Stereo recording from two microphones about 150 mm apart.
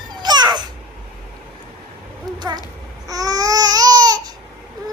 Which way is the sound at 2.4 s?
30° right (ahead or behind).